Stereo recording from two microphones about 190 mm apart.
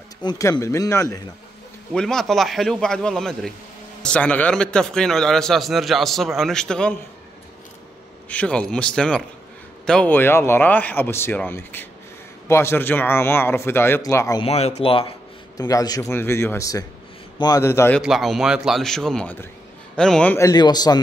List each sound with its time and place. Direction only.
0.2 s speech: 20° left (ahead or behind)
2.0 s a man's voice: 5° left (ahead or behind)
8.3 s a man's voice: 5° left (ahead or behind)
14.4 s speech: 35° left (ahead or behind)
15.5 s speech: 20° left (ahead or behind)
18.0 s a man's voice: centre (ahead or behind); by 21.0 s 20° left (ahead or behind)